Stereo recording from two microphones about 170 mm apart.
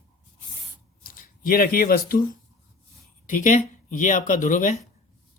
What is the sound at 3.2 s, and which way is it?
Speech, 50° left (ahead or behind).